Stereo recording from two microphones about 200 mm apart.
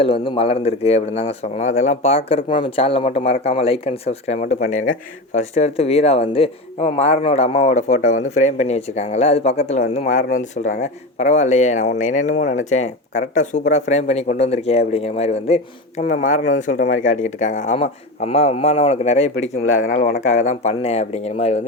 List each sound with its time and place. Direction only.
0.0 s speech: 25° left (ahead or behind)
20.0 s speech: 50° left (ahead or behind)
20.2 s speech: 35° left (ahead or behind)